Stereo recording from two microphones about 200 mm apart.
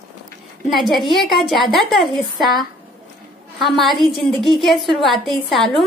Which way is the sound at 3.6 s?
Centre (ahead or behind).